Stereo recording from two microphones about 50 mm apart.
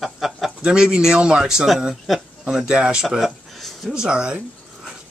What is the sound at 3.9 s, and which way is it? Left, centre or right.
Speech, centre.